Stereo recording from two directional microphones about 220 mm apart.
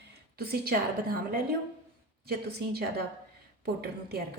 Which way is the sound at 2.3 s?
45° right (ahead or behind).